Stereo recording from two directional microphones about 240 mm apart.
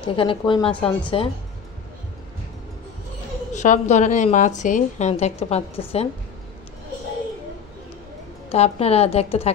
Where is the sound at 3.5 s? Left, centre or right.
Left.